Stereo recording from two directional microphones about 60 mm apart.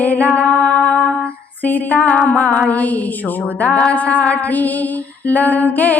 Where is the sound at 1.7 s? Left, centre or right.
Left.